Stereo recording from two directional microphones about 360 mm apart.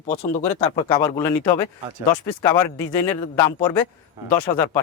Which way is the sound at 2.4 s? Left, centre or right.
Centre.